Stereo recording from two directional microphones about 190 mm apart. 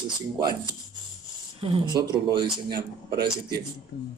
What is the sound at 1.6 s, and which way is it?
Speech, 30° right (ahead or behind).